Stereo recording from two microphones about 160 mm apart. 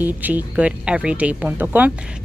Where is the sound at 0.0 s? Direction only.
10° right (ahead or behind).